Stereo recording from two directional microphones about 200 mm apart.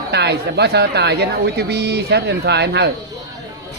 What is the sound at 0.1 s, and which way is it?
Speech, 55° right (ahead or behind).